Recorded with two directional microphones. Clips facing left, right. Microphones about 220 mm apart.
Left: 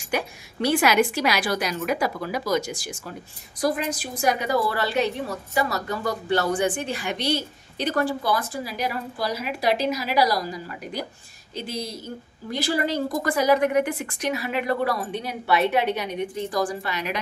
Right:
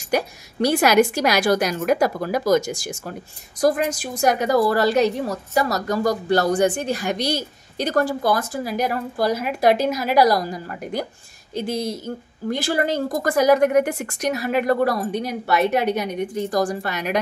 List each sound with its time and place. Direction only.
0.1 s a woman's voice: 40° right (ahead or behind)